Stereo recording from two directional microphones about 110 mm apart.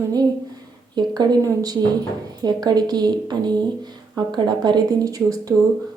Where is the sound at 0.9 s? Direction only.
40° right (ahead or behind).